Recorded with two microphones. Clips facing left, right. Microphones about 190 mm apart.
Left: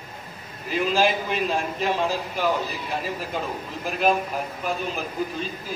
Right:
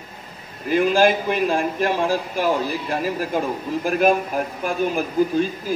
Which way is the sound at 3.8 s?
50° right (ahead or behind).